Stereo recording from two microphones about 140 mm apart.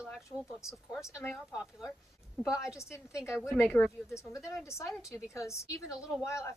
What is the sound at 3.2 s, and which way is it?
A woman's voice, 20° left (ahead or behind).